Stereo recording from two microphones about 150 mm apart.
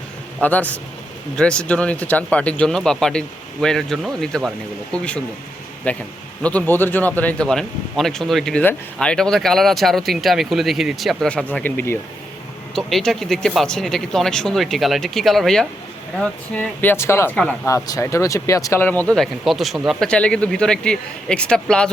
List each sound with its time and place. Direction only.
0.4 s speech: 10° left (ahead or behind)
17.8 s speech: 20° left (ahead or behind); by 21.8 s 5° left (ahead or behind)